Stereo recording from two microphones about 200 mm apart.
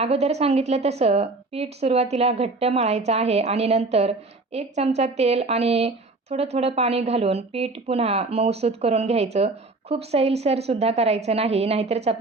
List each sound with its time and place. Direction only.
0.0 s speech: 30° right (ahead or behind)